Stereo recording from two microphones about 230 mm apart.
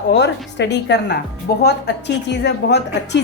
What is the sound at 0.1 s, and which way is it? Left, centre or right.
A woman's voice, left.